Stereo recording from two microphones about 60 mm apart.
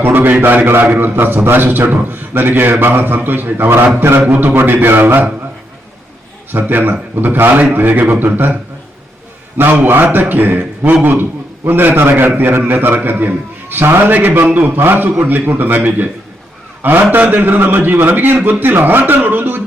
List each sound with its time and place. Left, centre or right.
0.0 s a man's voice: right
6.5 s a man's voice: right
9.6 s a man's voice: right